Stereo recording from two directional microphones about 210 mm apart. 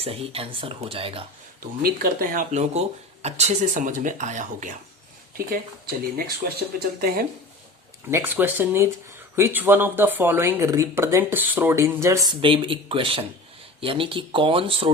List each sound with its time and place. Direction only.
0.0 s speech: 30° right (ahead or behind)
1.8 s speech: 45° right (ahead or behind)
6.7 s speech: 45° right (ahead or behind)
8.1 s speech: 10° right (ahead or behind); by 14.8 s 25° right (ahead or behind)